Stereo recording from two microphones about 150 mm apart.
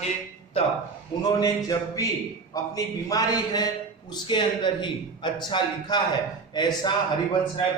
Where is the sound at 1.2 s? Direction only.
25° left (ahead or behind).